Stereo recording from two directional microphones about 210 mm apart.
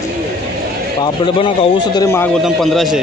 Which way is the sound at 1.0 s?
25° left (ahead or behind).